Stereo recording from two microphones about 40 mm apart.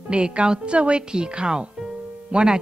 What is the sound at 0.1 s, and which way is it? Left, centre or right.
Speech, right.